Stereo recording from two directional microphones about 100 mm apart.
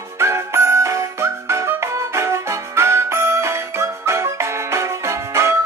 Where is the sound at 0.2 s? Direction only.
25° right (ahead or behind).